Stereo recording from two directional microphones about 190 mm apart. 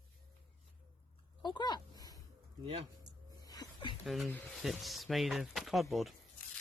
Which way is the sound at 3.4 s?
20° left (ahead or behind).